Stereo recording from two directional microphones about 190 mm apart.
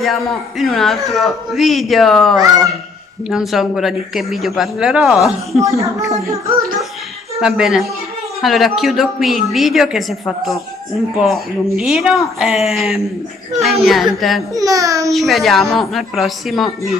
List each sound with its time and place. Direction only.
0.0 s a man's voice: centre (ahead or behind)
5.8 s speech: 15° right (ahead or behind)
7.3 s a man's voice: centre (ahead or behind)
14.5 s speech: 15° right (ahead or behind)
15.0 s a man's voice: centre (ahead or behind)